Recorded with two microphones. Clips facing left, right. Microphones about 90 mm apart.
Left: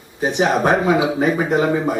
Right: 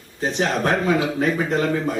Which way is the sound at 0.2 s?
15° left (ahead or behind).